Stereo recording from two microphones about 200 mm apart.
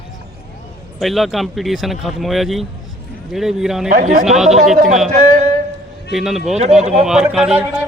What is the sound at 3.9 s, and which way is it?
Speech, 40° right (ahead or behind).